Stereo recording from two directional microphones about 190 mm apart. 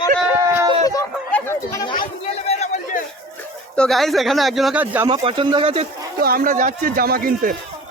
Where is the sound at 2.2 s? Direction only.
30° left (ahead or behind).